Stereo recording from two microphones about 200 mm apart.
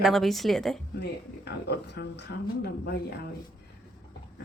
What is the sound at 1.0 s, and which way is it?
Speech, 55° left (ahead or behind).